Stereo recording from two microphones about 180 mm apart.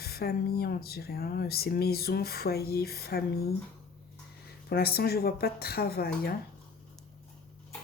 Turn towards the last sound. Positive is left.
turn(degrees=60)  # may be behind; listen again after turning